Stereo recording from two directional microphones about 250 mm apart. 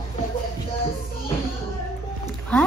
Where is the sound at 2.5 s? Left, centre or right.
Centre.